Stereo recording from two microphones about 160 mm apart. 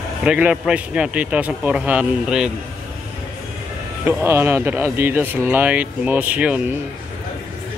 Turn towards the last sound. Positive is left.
turn(degrees=-10)  # may be behind; listen again after turning